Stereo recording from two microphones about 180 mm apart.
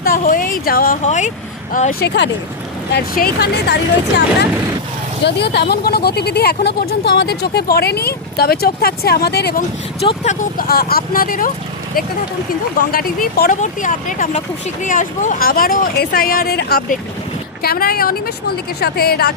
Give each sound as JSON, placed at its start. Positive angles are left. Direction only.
{"t": 0.0, "sound": "a sound", "side_deg": 50}
{"t": 1.0, "sound": "speech", "side_deg": 40}
{"t": 2.9, "sound": "speech", "side_deg": 60}
{"t": 5.2, "sound": "speech", "side_deg": 70}
{"t": 10.0, "sound": "speech", "side_deg": 35}
{"t": 10.6, "sound": "speech", "side_deg": 60}
{"t": 12.9, "sound": "speech", "side_deg": 55}
{"t": 13.6, "sound": "speech", "side_deg": 45}